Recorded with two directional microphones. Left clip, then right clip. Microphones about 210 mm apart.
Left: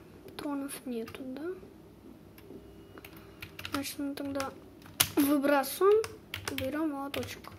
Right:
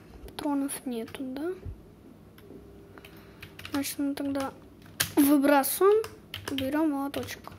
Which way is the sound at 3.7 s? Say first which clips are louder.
Right 5 dB; 10° right (ahead or behind).